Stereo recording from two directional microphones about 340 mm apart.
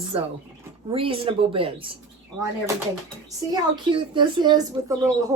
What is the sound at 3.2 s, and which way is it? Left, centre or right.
Speech, centre.